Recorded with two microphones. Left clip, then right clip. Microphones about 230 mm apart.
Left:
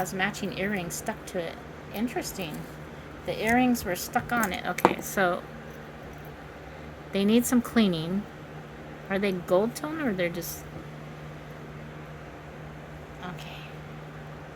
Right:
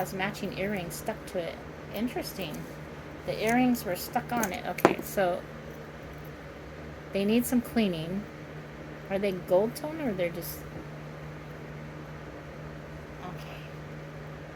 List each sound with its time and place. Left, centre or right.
0.0 s a woman's voice: left
7.1 s a woman's voice: left
9.0 s a woman's voice: left